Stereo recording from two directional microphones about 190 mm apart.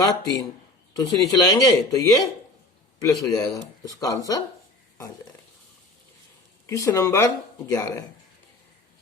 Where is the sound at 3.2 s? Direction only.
20° left (ahead or behind).